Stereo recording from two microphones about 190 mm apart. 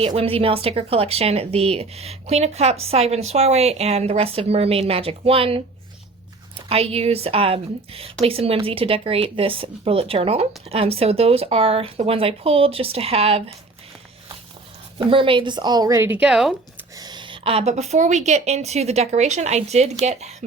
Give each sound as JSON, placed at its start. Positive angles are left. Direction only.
{"t": 0.0, "sound": "speech", "side_deg": -30}
{"t": 6.7, "sound": "speech", "side_deg": -30}
{"t": 14.9, "sound": "speech", "side_deg": -25}
{"t": 17.0, "sound": "speech", "side_deg": -25}